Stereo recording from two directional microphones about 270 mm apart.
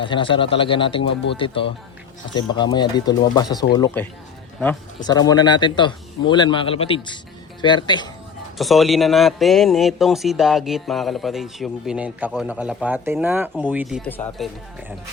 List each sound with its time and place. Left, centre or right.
0.0 s a man's voice: centre
5.0 s a man's voice: centre
8.5 s a man's voice: centre
14.0 s a man's voice: centre